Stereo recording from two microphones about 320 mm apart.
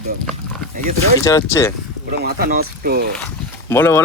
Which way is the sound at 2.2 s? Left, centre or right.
Right.